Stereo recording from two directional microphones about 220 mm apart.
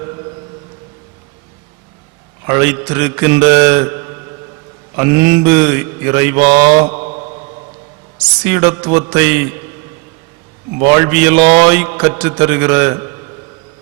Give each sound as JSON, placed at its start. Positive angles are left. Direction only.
{"t": 2.5, "sound": "mantra", "side_deg": -10}
{"t": 6.7, "sound": "mantra", "side_deg": -25}
{"t": 8.4, "sound": "mantra", "side_deg": -10}
{"t": 10.8, "sound": "mantra", "side_deg": -10}